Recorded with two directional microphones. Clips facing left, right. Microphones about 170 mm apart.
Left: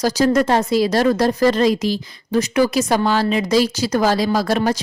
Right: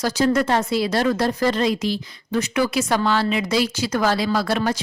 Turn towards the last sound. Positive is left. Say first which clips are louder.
# left 3 dB
turn(degrees=40)  # may be behind; listen again after turning